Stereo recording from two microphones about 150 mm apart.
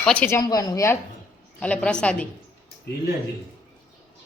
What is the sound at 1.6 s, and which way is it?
Speech, 10° left (ahead or behind).